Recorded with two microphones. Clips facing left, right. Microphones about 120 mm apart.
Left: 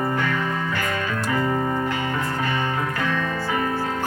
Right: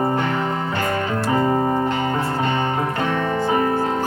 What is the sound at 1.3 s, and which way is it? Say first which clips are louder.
Music: right 5 dB; 30° right (ahead or behind).